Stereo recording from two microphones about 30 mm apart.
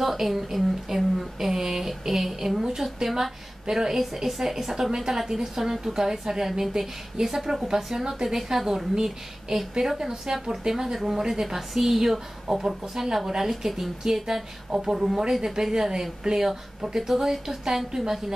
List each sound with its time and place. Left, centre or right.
0.0 s a woman's voice: centre
11.4 s a woman's voice: centre